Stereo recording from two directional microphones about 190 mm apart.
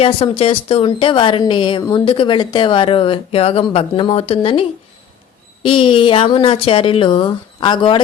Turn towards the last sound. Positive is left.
turn(degrees=25)  # may be behind; listen again after turning